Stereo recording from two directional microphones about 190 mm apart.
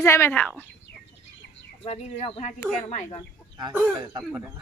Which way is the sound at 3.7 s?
Centre (ahead or behind).